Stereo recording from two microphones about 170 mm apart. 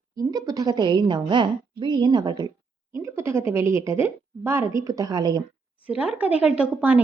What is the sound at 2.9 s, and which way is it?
A woman's voice, 15° right (ahead or behind).